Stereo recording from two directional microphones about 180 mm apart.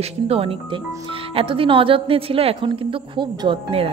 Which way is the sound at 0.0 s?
35° right (ahead or behind).